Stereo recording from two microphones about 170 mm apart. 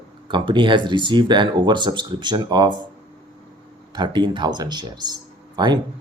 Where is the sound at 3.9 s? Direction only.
25° right (ahead or behind).